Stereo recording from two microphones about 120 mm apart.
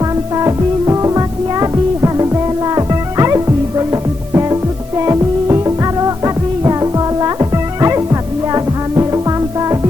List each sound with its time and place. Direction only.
0.3 s music: 30° right (ahead or behind)